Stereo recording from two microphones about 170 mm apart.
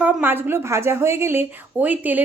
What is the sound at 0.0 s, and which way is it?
Speech, 10° right (ahead or behind).